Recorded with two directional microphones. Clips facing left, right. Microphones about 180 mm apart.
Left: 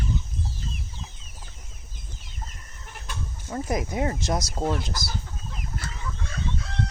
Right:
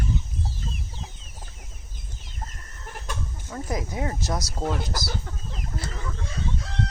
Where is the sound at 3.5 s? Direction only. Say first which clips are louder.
Left 3 dB; 20° left (ahead or behind).